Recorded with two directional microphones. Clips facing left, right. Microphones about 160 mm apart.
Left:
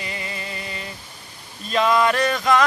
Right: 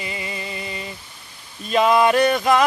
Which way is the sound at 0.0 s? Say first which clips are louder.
Right 2 dB; 10° right (ahead or behind).